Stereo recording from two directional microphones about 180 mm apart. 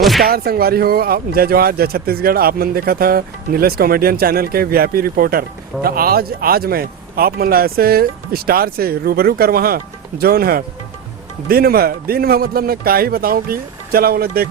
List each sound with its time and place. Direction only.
0.0 s speech: centre (ahead or behind)
0.3 s speech: 55° right (ahead or behind)